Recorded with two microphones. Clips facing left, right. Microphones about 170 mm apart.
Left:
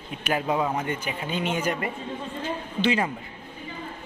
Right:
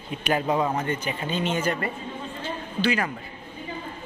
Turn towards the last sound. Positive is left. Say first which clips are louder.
# left 1 dB
turn(degrees=20)  # may be behind; listen again after turning